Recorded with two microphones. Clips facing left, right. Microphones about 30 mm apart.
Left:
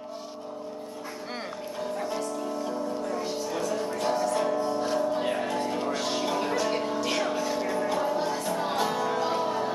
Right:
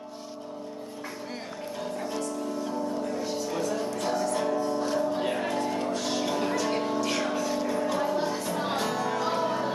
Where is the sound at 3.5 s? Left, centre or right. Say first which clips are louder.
Left 1 dB; centre.